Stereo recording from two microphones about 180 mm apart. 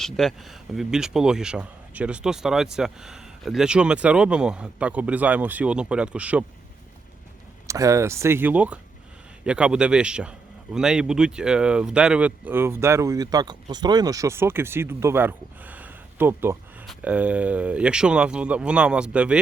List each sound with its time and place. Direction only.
0.0 s speech: centre (ahead or behind)
7.7 s a man's voice: 15° right (ahead or behind)